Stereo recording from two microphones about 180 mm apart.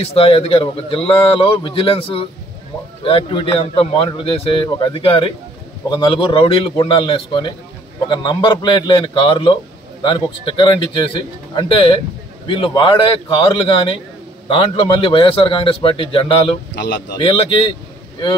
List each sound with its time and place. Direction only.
0.0 s speech: 30° left (ahead or behind)
16.7 s speech: 70° left (ahead or behind)
17.1 s speech: 30° left (ahead or behind)